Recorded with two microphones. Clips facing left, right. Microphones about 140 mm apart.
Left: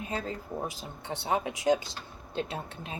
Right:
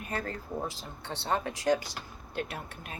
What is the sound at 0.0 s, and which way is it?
Speech, 15° left (ahead or behind).